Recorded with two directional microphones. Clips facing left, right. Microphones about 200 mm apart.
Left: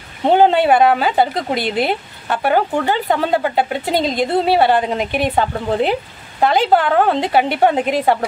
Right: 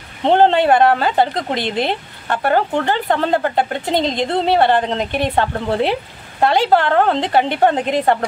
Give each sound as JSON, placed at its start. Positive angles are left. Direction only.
{"t": 0.2, "sound": "speech", "side_deg": 10}